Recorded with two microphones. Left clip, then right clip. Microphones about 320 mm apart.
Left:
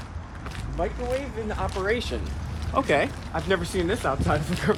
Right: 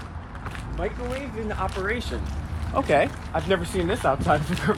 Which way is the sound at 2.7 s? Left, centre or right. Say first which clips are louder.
Right 2 dB; centre.